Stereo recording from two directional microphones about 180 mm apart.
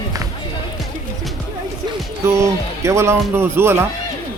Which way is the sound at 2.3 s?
15° right (ahead or behind).